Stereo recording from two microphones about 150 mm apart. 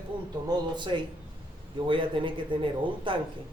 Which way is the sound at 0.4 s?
30° right (ahead or behind).